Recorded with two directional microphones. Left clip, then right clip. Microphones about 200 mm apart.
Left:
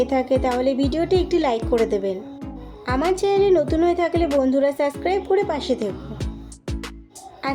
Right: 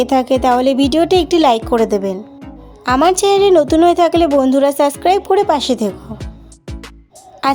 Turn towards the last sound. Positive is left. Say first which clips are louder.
# right 11 dB
turn(degrees=-55)  # may be behind; listen again after turning